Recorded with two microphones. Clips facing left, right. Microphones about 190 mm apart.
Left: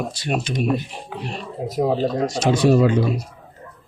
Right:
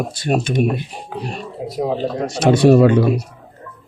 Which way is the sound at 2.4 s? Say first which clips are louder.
Right 6 dB; 60° right (ahead or behind).